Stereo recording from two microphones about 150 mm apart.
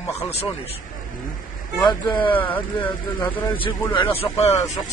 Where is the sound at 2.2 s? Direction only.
10° left (ahead or behind).